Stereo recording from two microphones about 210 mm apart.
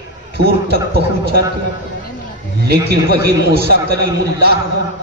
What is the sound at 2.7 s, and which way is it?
A man's voice, 50° right (ahead or behind).